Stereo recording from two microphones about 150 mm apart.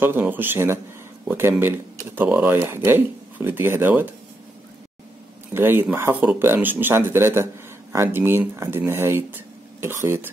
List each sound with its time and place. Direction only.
0.0 s speech: 15° right (ahead or behind)
5.5 s speech: 15° right (ahead or behind)